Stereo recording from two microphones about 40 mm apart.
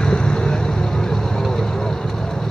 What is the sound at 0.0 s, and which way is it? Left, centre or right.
Vehicle, left.